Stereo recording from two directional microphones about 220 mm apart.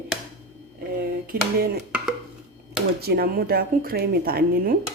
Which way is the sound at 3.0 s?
45° right (ahead or behind).